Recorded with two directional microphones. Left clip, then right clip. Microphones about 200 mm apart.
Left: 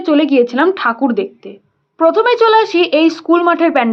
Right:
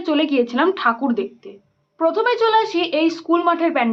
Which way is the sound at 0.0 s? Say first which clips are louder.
Left 7 dB; 25° left (ahead or behind).